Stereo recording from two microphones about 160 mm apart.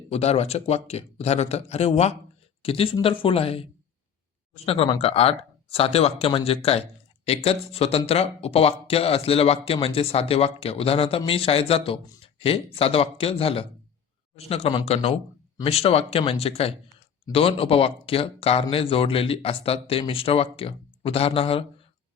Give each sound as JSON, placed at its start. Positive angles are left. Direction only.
{"t": 0.1, "sound": "speech", "side_deg": 40}